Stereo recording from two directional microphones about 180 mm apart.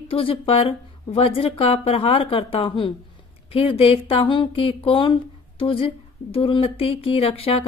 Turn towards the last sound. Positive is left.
turn(degrees=30)  # may be behind; listen again after turning